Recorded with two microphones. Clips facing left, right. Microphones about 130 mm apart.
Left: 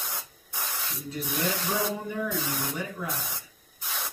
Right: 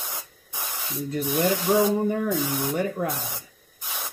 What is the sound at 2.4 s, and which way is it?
Speech, 15° right (ahead or behind).